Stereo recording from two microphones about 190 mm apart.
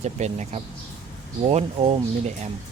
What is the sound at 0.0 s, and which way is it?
Speech, 35° right (ahead or behind).